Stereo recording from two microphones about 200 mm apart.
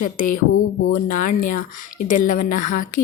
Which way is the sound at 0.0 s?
40° left (ahead or behind).